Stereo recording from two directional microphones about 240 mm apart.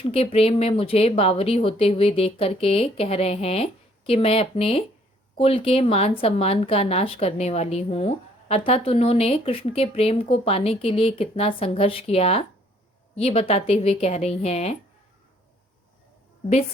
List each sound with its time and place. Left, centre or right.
0.0 s speech: left